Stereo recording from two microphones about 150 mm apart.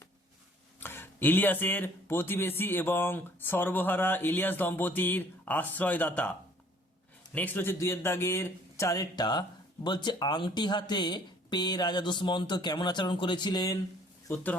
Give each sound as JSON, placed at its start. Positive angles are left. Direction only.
{"t": 0.8, "sound": "speech", "side_deg": 15}
{"t": 7.3, "sound": "speech", "side_deg": 10}
{"t": 14.3, "sound": "speech", "side_deg": 10}